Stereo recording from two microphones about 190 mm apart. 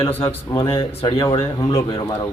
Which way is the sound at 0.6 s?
30° left (ahead or behind).